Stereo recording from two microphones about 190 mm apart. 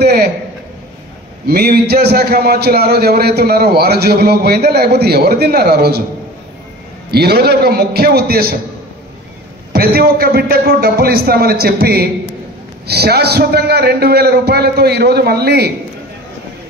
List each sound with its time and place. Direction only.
0.0 s a sound: 55° right (ahead or behind)
1.5 s a man's voice: 55° right (ahead or behind)
7.1 s a man's voice: 55° right (ahead or behind)
9.7 s a man's voice: 55° right (ahead or behind)